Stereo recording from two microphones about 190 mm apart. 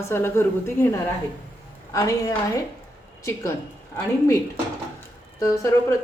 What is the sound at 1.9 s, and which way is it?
A woman's voice, 15° left (ahead or behind).